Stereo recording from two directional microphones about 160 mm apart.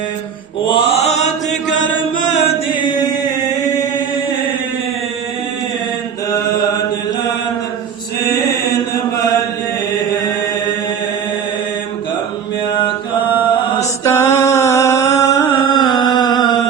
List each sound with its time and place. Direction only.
0.6 s mantra: 35° left (ahead or behind)
2.1 s chant: 50° left (ahead or behind)
14.0 s mantra: 15° left (ahead or behind)
15.6 s a sound: 25° left (ahead or behind)